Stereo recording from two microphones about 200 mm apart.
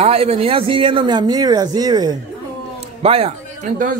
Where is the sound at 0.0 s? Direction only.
30° right (ahead or behind).